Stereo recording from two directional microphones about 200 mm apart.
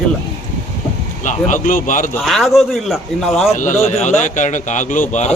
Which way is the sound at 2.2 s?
Centre (ahead or behind).